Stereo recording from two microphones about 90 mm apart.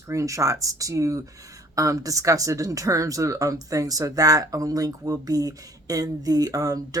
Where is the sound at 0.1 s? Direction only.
35° right (ahead or behind).